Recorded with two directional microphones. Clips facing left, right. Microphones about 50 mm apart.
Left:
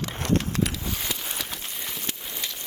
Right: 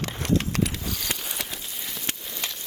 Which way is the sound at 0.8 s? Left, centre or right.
Left.